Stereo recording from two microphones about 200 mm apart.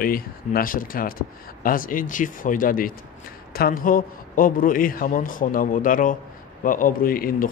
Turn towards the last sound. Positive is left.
turn(degrees=45)  # may be behind; listen again after turning